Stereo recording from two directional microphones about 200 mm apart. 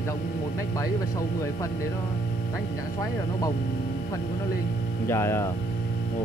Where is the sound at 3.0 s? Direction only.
20° left (ahead or behind).